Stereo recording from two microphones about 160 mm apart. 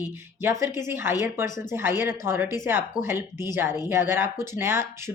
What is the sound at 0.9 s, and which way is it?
Speech, 15° right (ahead or behind).